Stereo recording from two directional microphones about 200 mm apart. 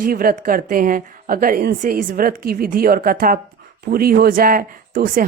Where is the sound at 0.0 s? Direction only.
45° right (ahead or behind).